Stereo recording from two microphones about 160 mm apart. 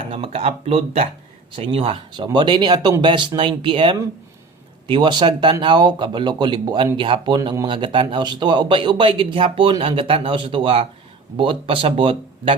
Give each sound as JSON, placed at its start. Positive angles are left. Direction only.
{"t": 0.1, "sound": "speech", "side_deg": -35}